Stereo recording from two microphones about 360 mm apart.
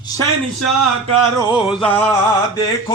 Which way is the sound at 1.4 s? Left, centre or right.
Centre.